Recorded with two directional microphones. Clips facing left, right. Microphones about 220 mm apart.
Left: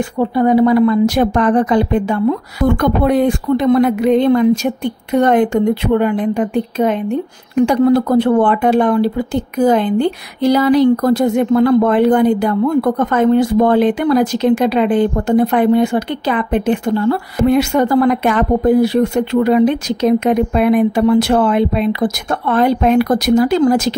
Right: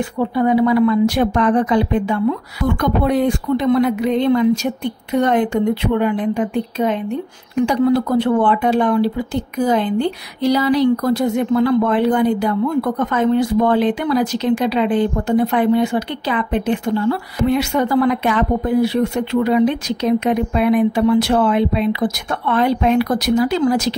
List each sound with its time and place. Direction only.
0.4 s speech: 40° left (ahead or behind)